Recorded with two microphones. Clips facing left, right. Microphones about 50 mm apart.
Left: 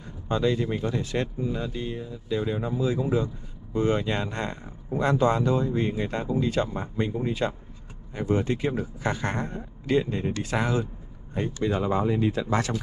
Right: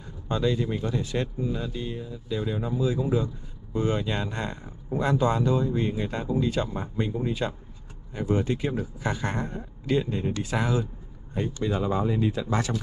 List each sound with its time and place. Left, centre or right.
0.3 s speech: left